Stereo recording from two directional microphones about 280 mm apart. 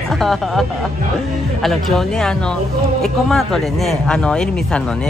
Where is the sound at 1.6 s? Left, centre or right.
Centre.